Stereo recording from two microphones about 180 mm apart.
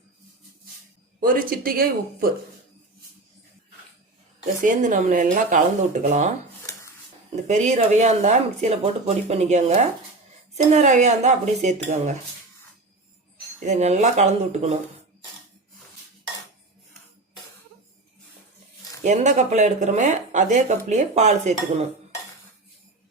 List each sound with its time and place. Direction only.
1.2 s speech: 55° right (ahead or behind)
4.6 s speech: 45° right (ahead or behind)
7.4 s speech: 40° right (ahead or behind)
13.6 s speech: 40° right (ahead or behind)
19.0 s speech: 40° right (ahead or behind)